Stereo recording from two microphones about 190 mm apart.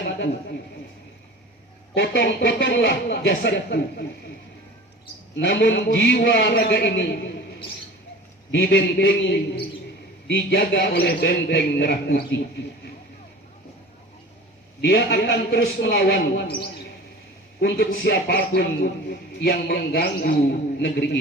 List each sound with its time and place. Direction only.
2.0 s speech: 65° left (ahead or behind)
5.4 s speech: 70° left (ahead or behind)
8.5 s speech: 55° left (ahead or behind)
14.8 s speech: 60° left (ahead or behind)